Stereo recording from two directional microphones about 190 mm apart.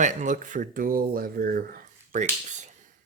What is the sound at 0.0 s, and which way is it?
Speech, 40° right (ahead or behind).